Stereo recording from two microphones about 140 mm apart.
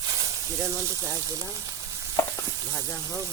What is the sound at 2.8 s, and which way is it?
Speech, 25° right (ahead or behind).